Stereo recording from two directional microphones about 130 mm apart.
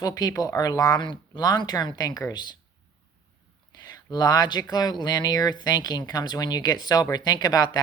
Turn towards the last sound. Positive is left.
turn(degrees=30)  # may be behind; listen again after turning